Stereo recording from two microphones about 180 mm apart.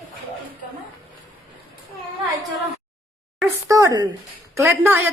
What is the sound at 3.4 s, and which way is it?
A woman's voice, 20° right (ahead or behind).